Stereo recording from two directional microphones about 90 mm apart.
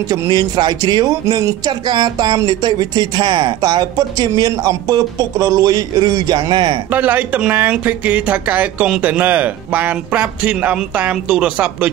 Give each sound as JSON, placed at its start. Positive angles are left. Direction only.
{"t": 0.1, "sound": "speech", "side_deg": -50}
{"t": 6.9, "sound": "a man's voice", "side_deg": -20}